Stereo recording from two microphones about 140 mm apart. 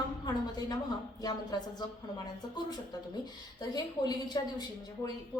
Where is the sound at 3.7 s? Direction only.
30° left (ahead or behind).